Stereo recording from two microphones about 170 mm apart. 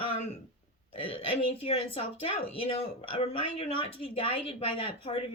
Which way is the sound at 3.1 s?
35° left (ahead or behind).